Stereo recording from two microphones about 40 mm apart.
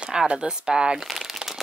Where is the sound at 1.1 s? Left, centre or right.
Centre.